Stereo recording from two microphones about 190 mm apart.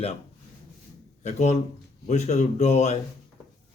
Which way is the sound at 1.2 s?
35° left (ahead or behind).